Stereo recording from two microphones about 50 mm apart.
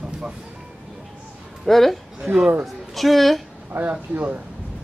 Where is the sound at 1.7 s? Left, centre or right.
Centre.